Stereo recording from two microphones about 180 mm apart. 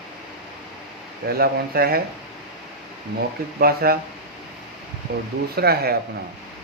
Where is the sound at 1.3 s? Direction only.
60° right (ahead or behind).